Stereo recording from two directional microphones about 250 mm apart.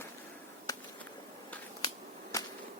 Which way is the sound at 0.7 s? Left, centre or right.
Centre.